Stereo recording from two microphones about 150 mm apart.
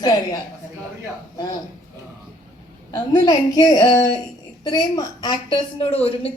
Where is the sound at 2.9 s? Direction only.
25° left (ahead or behind).